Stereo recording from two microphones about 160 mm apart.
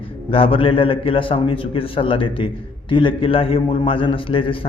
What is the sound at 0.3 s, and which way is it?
A man's voice, 35° left (ahead or behind).